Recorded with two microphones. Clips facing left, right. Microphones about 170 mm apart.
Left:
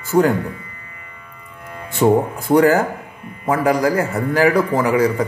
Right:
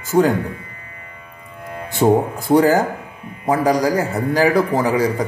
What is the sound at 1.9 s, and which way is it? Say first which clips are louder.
Speech: even; 35° right (ahead or behind).